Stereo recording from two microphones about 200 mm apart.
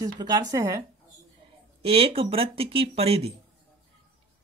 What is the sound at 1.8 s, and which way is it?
Speech, 25° right (ahead or behind).